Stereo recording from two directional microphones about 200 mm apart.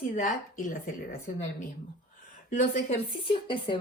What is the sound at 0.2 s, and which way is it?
Speech, 40° left (ahead or behind).